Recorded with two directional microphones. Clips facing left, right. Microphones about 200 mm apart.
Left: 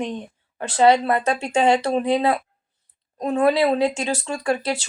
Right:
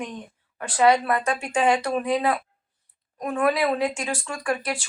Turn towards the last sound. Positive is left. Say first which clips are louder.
# left 4 dB
turn(degrees=25)  # may be behind; listen again after turning